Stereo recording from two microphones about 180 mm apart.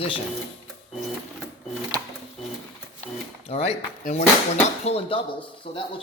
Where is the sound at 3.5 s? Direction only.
35° left (ahead or behind).